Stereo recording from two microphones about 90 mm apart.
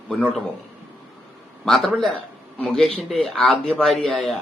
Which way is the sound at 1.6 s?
5° left (ahead or behind).